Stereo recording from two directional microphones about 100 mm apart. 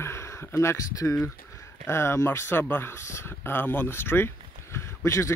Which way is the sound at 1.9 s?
25° left (ahead or behind).